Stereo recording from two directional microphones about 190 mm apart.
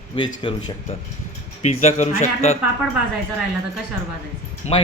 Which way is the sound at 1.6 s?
35° left (ahead or behind).